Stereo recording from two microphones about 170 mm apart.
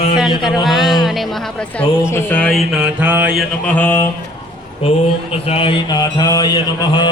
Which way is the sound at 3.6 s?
10° left (ahead or behind).